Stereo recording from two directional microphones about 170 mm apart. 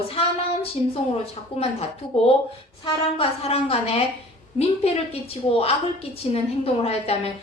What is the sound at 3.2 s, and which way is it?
A woman's voice, 35° left (ahead or behind).